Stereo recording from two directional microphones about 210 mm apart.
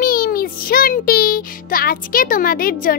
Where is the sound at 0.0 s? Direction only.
45° left (ahead or behind).